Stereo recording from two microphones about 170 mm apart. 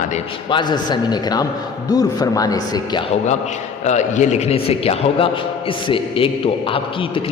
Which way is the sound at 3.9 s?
45° left (ahead or behind).